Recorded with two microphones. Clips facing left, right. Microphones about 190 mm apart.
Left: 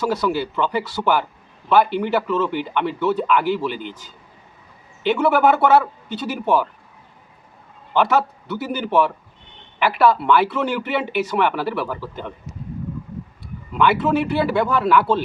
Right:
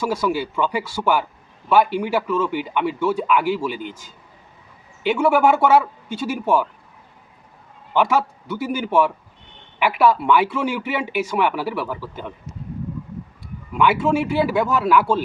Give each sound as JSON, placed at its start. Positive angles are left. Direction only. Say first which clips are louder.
{"t": 0.1, "sound": "speech", "louder": "left 1 dB", "side_deg": -10}
{"t": 3.8, "sound": "a man's voice", "louder": "even", "side_deg": -45}
{"t": 5.0, "sound": "speech", "louder": "even", "side_deg": -10}
{"t": 7.9, "sound": "speech", "louder": "left 1 dB", "side_deg": -10}
{"t": 13.7, "sound": "speech", "louder": "even", "side_deg": -10}